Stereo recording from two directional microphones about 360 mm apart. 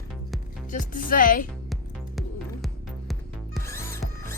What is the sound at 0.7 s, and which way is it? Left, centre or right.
Speech, left.